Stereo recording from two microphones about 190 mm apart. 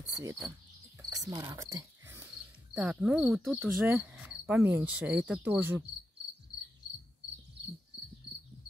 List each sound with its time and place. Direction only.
1.1 s cricket: 20° right (ahead or behind)
2.7 s speech: 5° right (ahead or behind)